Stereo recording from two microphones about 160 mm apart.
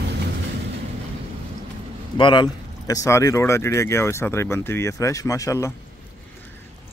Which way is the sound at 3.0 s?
15° left (ahead or behind).